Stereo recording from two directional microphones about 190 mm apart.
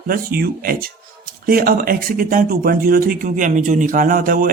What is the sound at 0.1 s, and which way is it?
Speech, 50° right (ahead or behind).